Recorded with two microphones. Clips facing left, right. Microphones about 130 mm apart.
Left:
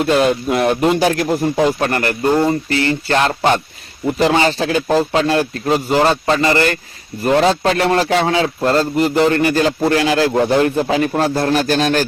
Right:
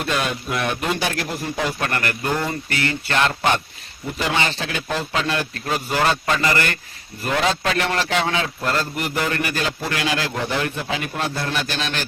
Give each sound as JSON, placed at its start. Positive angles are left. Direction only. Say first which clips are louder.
{"t": 0.0, "sound": "speech", "louder": "left 10 dB", "side_deg": 30}
{"t": 0.9, "sound": "speech", "louder": "left 10 dB", "side_deg": 45}
{"t": 1.6, "sound": "speech", "louder": "left 8 dB", "side_deg": 30}